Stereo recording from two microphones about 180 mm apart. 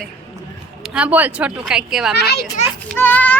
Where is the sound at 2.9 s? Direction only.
10° left (ahead or behind).